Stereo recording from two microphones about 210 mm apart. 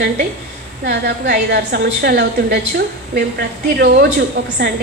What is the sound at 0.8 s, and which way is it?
A woman's voice, 50° right (ahead or behind).